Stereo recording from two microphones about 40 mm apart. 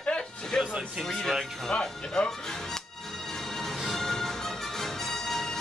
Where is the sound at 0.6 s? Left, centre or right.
Centre.